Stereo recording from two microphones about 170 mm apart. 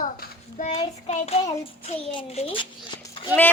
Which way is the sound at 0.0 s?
50° left (ahead or behind).